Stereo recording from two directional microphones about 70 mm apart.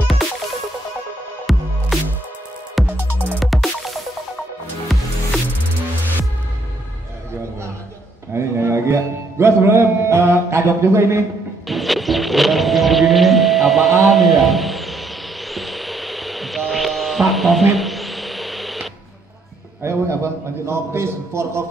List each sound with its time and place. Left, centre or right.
1.5 s music: centre
2.9 s music: right
3.3 s music: centre
8.3 s music: right
11.6 s music: centre
14.0 s a sound: centre
19.8 s a sound: right
20.6 s a man's voice: right